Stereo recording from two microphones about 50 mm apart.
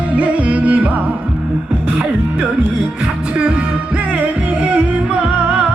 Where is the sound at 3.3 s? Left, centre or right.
Right.